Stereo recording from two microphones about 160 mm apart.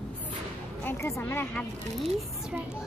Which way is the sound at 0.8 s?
15° left (ahead or behind).